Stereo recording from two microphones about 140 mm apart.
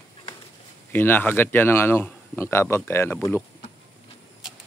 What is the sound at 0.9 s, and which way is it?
Speech, 15° left (ahead or behind).